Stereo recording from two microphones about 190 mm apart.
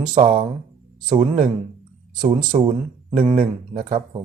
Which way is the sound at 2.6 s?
40° right (ahead or behind).